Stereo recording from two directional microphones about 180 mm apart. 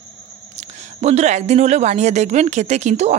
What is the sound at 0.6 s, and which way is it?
Speech, 40° right (ahead or behind).